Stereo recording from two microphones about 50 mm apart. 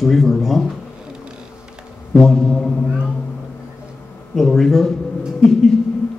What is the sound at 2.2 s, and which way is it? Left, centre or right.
Speech, centre.